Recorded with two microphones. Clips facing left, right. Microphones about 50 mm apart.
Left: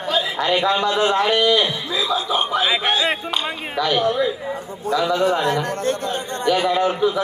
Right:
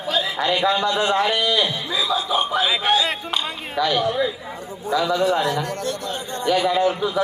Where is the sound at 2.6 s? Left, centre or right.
Centre.